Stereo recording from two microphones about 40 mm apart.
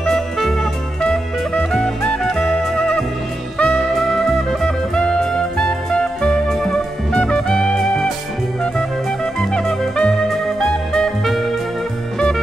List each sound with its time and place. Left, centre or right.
1.7 s music: centre
3.5 s music: left
3.9 s music: centre
4.9 s music: left
9.4 s jazz: left
10.6 s music: centre